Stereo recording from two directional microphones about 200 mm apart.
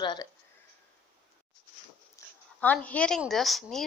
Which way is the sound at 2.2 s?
15° left (ahead or behind).